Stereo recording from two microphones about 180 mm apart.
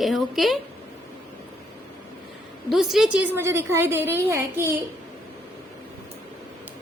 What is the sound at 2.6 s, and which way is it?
A woman's voice, centre (ahead or behind).